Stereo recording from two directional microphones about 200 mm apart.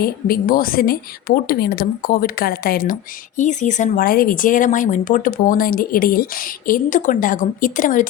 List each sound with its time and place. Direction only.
0.0 s speech: 45° left (ahead or behind)